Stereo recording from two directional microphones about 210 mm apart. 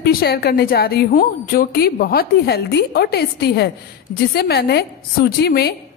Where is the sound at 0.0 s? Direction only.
45° left (ahead or behind).